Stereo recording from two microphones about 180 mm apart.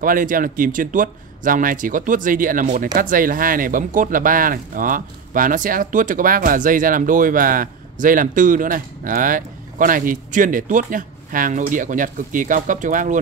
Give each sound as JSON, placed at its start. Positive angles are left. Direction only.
{"t": 0.0, "sound": "a man's voice", "side_deg": -50}